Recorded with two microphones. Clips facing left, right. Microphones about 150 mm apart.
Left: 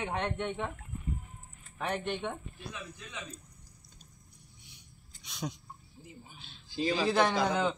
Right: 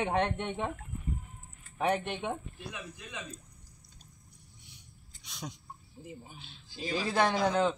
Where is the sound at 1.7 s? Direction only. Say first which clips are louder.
Right 3 dB; 15° right (ahead or behind).